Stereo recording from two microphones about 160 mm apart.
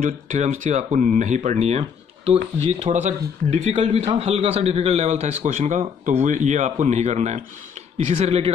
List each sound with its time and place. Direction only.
0.0 s speech: 55° right (ahead or behind)